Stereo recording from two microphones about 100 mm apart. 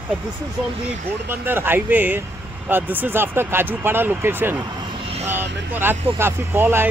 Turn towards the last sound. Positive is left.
turn(degrees=-20)  # may be behind; listen again after turning